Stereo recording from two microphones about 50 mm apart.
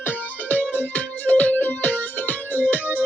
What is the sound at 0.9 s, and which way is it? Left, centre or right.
Music, left.